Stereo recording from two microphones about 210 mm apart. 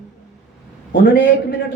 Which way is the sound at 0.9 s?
45° left (ahead or behind).